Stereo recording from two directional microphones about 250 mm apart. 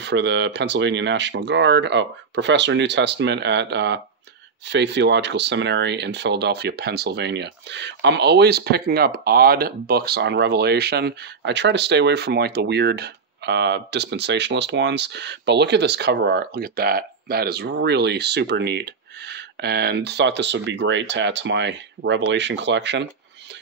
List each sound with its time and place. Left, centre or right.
0.0 s speech: right